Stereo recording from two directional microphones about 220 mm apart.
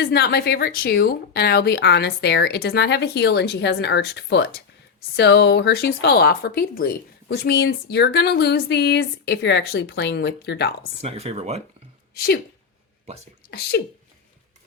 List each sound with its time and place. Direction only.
0.0 s speech: 50° left (ahead or behind)
11.0 s speech: 30° right (ahead or behind)
12.1 s speech: 45° left (ahead or behind)
13.5 s speech: 50° left (ahead or behind)